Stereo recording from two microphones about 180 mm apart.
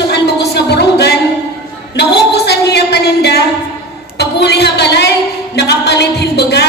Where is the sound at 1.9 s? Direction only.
65° left (ahead or behind).